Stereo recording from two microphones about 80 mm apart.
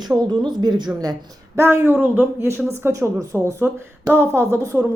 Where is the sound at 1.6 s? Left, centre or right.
Right.